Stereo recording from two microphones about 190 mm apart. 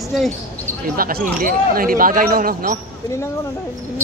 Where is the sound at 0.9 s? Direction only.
50° right (ahead or behind).